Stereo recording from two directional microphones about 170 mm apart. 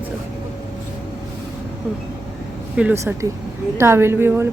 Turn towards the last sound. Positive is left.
turn(degrees=-15)  # may be behind; listen again after turning